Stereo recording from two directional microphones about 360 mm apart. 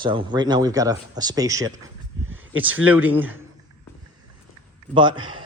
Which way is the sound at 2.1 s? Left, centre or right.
Right.